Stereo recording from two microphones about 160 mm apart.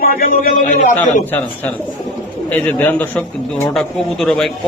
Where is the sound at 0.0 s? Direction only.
65° left (ahead or behind).